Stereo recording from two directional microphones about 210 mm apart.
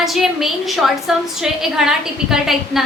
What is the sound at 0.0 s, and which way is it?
A woman's voice, centre (ahead or behind).